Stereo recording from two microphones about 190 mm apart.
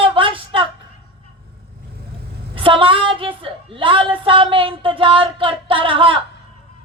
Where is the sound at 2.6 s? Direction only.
25° right (ahead or behind).